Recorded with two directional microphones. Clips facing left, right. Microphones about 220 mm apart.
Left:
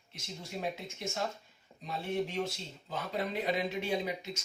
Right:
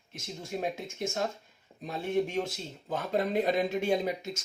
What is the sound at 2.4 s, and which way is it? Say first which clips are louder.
Speech: right 3 dB; 50° right (ahead or behind).